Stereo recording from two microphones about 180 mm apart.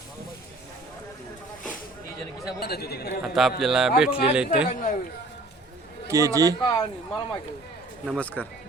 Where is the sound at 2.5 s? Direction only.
60° left (ahead or behind).